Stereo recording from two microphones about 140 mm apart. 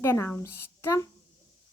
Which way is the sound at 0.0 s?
20° left (ahead or behind).